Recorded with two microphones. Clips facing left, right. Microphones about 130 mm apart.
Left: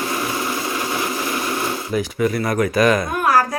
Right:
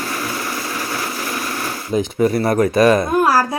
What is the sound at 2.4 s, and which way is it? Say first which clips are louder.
Speech: right 3 dB; 25° right (ahead or behind).